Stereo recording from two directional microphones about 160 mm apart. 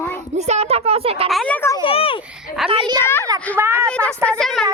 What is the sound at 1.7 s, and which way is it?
Speech, 35° left (ahead or behind).